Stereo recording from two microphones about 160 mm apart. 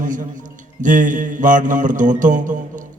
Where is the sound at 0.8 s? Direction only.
55° right (ahead or behind).